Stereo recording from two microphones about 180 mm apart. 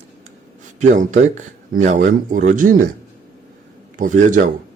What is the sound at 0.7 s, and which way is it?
Speech, 45° right (ahead or behind).